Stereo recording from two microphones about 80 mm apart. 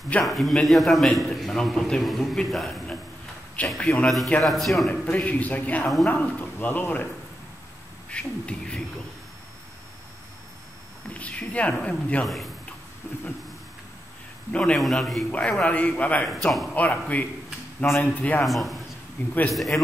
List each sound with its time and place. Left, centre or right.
0.2 s a man's voice: centre
5.1 s speech: centre
8.1 s a man's voice: centre
11.1 s a man's voice: centre
14.5 s a man's voice: centre
14.8 s a man's voice: centre
15.3 s a man's voice: centre
16.4 s a man's voice: centre
16.7 s speech: centre
18.4 s a man's voice: centre
19.2 s speech: left
19.5 s a man's voice: centre